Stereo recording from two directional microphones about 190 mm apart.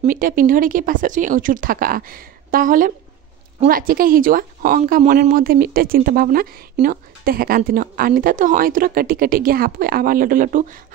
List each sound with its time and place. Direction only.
0.0 s speech: 50° right (ahead or behind)